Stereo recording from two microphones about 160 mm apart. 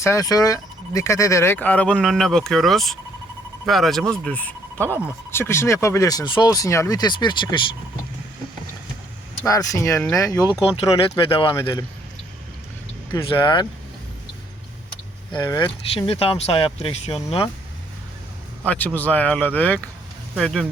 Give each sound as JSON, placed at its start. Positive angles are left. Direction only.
{"t": 0.0, "sound": "speech", "side_deg": 20}
{"t": 9.5, "sound": "speech", "side_deg": 20}
{"t": 13.1, "sound": "speech", "side_deg": 30}
{"t": 15.3, "sound": "speech", "side_deg": 25}
{"t": 18.6, "sound": "a man's voice", "side_deg": 10}